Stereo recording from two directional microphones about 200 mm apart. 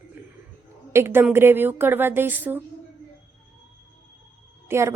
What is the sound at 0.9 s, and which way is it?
A woman's voice, 10° right (ahead or behind).